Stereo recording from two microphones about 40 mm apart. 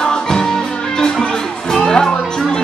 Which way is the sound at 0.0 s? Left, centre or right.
Centre.